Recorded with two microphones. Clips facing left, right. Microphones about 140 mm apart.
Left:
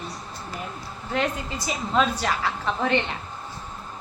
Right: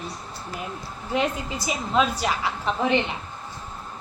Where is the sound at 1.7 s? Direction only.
15° right (ahead or behind).